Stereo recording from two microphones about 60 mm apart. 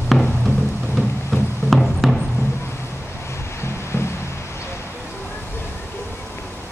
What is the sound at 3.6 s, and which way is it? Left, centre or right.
Music, left.